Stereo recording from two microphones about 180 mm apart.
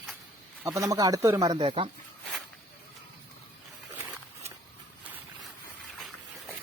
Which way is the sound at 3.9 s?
10° right (ahead or behind).